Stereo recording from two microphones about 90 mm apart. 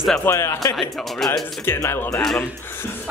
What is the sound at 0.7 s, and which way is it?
Speech, 5° left (ahead or behind).